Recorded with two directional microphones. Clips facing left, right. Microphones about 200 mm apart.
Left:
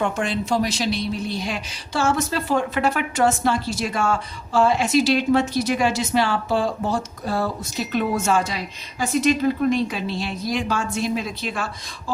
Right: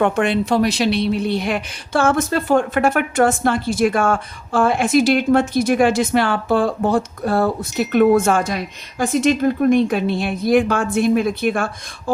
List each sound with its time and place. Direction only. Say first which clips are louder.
0.0 s speech: right 6 dB; 60° right (ahead or behind)